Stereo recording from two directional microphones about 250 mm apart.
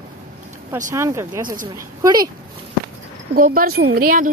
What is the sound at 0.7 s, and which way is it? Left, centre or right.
Speech, centre.